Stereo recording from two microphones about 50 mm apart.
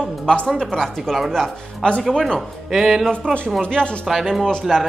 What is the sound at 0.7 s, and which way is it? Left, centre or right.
A woman's voice, centre.